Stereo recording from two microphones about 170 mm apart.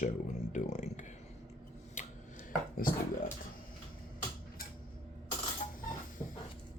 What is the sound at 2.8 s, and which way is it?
Speech, 55° left (ahead or behind).